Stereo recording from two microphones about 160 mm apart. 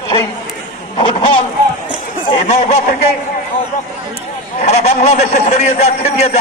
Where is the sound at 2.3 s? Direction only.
40° left (ahead or behind).